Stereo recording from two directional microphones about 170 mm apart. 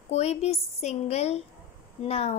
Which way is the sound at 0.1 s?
40° left (ahead or behind).